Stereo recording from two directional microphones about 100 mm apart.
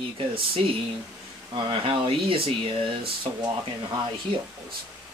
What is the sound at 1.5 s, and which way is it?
Speech, 60° right (ahead or behind).